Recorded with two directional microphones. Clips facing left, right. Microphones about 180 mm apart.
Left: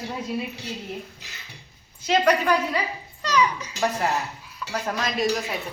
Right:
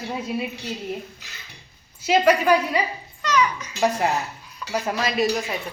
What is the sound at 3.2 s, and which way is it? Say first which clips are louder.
Music: right 1 dB; 30° left (ahead or behind).